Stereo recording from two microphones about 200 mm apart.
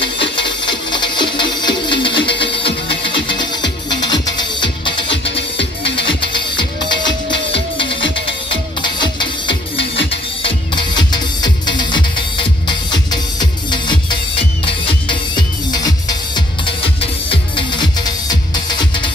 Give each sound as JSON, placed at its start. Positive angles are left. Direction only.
{"t": 0.0, "sound": "music", "side_deg": 25}